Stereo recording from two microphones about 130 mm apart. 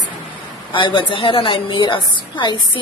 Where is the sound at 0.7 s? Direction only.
40° left (ahead or behind).